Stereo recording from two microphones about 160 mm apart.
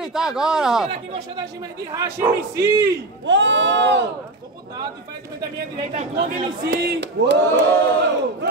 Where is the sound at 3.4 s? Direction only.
90° right.